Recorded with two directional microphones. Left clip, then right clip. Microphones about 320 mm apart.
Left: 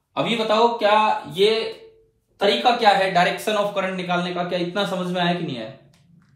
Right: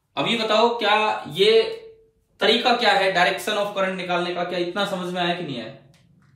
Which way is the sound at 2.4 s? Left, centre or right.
Centre.